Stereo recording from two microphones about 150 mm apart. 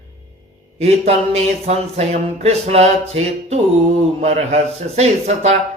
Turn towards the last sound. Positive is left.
turn(degrees=-45)  # may be behind; listen again after turning